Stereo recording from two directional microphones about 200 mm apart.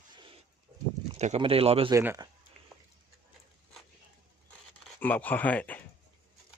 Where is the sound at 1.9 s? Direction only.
15° right (ahead or behind).